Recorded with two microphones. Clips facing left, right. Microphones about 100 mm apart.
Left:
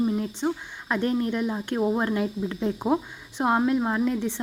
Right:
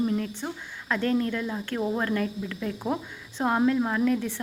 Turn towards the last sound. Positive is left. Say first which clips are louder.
# even
turn(degrees=20)  # may be behind; listen again after turning